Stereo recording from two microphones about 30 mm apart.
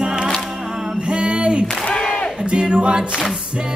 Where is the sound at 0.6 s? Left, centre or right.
Right.